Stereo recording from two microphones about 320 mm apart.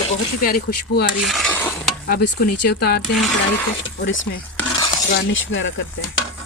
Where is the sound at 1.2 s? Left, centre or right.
Centre.